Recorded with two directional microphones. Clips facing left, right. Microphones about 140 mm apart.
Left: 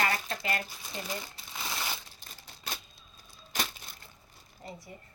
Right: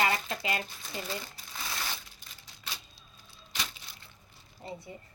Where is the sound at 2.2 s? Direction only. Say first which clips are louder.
Left 2 dB; 45° left (ahead or behind).